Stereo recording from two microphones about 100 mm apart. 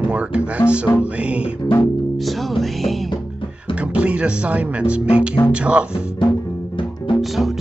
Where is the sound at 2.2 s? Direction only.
Centre (ahead or behind).